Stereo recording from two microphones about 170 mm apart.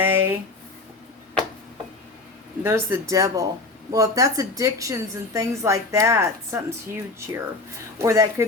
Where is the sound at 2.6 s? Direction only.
15° right (ahead or behind).